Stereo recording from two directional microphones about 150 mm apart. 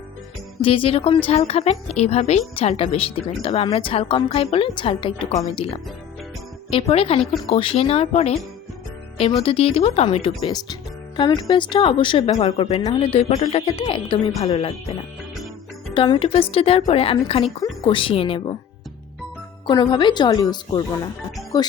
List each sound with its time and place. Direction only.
0.6 s a woman's voice: 40° left (ahead or behind)
16.0 s a woman's voice: 35° left (ahead or behind)
19.6 s speech: 30° left (ahead or behind)